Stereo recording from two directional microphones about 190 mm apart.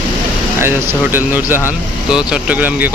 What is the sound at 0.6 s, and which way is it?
Speech, 10° right (ahead or behind).